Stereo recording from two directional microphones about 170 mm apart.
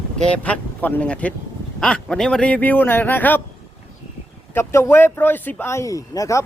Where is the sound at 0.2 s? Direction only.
5° left (ahead or behind).